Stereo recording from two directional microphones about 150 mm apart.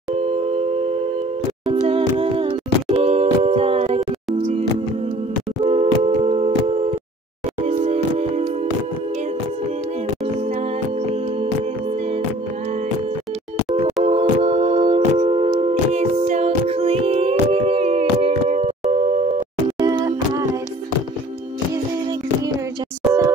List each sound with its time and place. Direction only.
0.2 s dial tone: 45° right (ahead or behind)
1.9 s music: 40° right (ahead or behind)
5.6 s music: 45° right (ahead or behind)
10.4 s music: 50° right (ahead or behind)
14.0 s music: 45° right (ahead or behind)
15.6 s a capella: 45° right (ahead or behind)
19.8 s music: 25° right (ahead or behind)